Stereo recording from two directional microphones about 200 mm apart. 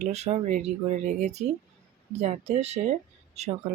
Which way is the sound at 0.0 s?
35° right (ahead or behind).